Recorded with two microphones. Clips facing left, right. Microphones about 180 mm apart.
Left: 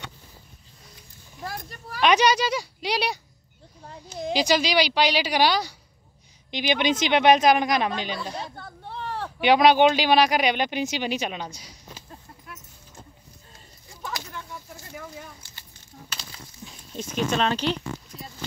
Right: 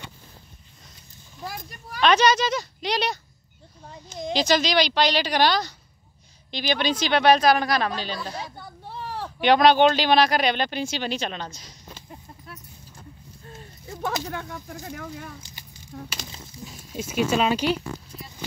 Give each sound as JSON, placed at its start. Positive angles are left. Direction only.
{"t": 1.4, "sound": "speech", "side_deg": 0}
{"t": 2.0, "sound": "speech", "side_deg": 15}
{"t": 8.5, "sound": "a sound", "side_deg": -5}
{"t": 9.4, "sound": "speech", "side_deg": 10}
{"t": 14.3, "sound": "speech", "side_deg": -70}
{"t": 15.4, "sound": "a sound", "side_deg": -15}
{"t": 15.9, "sound": "speech", "side_deg": -65}
{"t": 16.6, "sound": "speech", "side_deg": -10}